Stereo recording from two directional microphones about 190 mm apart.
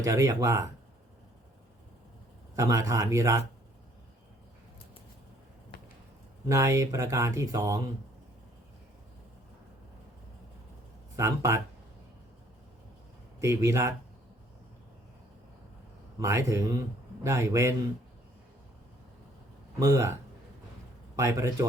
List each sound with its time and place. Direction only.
0.0 s speech: 15° right (ahead or behind)
2.6 s speech: 15° right (ahead or behind)
6.5 s speech: 15° right (ahead or behind)
11.2 s speech: 15° right (ahead or behind)
13.4 s speech: 15° right (ahead or behind)
16.2 s speech: 15° right (ahead or behind)
19.8 s speech: 15° right (ahead or behind)
21.2 s speech: 15° right (ahead or behind)